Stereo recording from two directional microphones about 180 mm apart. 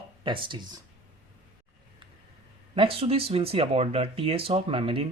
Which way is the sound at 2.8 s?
30° right (ahead or behind).